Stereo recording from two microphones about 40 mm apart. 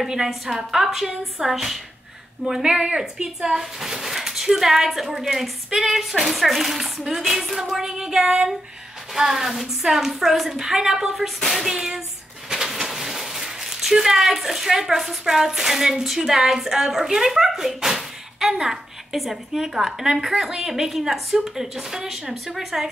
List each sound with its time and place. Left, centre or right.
0.1 s speech: centre
2.5 s a woman's voice: centre
3.4 s speech: centre
10.6 s speech: centre
11.1 s speech: centre
11.7 s speech: centre